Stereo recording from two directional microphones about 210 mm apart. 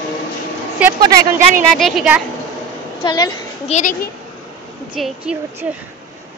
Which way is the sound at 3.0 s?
20° left (ahead or behind).